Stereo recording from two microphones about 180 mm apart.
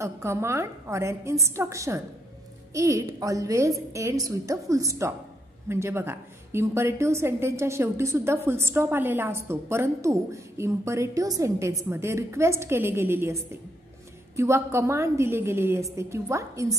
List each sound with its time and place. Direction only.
0.0 s a woman's voice: 15° right (ahead or behind)